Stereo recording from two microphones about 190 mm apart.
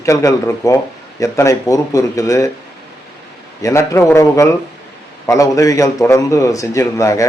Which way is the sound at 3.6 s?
15° left (ahead or behind).